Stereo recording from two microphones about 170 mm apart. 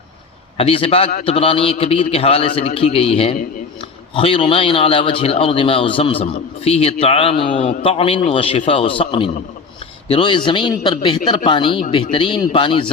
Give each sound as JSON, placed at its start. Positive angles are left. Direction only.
{"t": 0.5, "sound": "a man's voice", "side_deg": 35}